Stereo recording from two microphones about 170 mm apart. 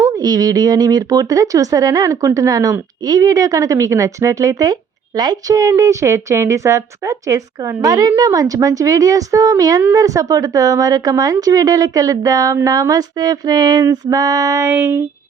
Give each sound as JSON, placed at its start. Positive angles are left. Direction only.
{"t": 0.2, "sound": "speech", "side_deg": -20}